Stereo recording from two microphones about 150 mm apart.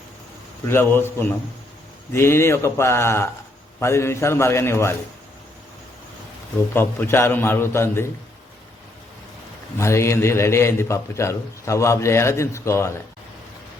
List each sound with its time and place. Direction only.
0.7 s a man's voice: 15° left (ahead or behind)
6.7 s a man's voice: 15° left (ahead or behind)
9.7 s a man's voice: 20° left (ahead or behind)